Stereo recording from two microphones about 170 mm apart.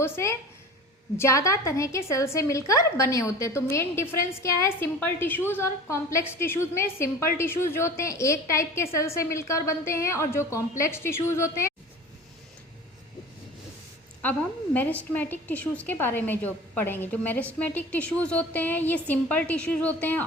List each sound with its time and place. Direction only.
0.0 s a woman's voice: 15° left (ahead or behind)
14.2 s a woman's voice: 10° left (ahead or behind)